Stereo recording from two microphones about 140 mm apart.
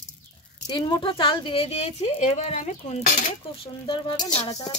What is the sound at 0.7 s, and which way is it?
A woman's voice, 35° left (ahead or behind).